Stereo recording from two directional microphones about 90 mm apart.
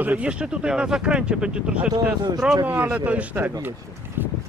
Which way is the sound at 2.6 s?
25° right (ahead or behind).